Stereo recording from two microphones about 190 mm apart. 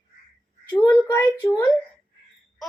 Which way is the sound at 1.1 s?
15° left (ahead or behind).